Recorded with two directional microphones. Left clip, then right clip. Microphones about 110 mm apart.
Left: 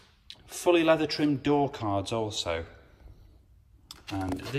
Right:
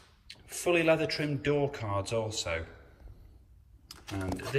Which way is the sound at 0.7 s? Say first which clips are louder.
Left 3 dB; 30° left (ahead or behind).